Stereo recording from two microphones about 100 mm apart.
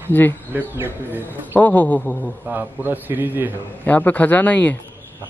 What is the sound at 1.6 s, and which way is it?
Speech, 15° left (ahead or behind).